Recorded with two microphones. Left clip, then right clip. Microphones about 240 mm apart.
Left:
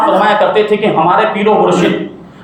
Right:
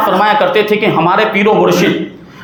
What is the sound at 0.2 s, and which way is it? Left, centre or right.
A man's voice, right.